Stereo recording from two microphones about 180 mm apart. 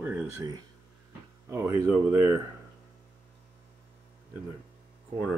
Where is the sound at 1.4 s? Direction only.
15° right (ahead or behind).